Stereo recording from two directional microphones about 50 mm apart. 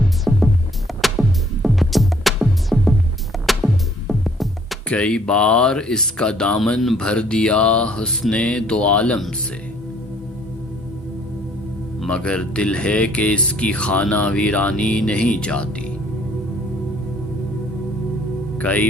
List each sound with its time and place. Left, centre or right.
0.3 s music: centre
1.6 s music: centre
4.9 s speech: left
12.0 s speech: left
18.5 s speech: left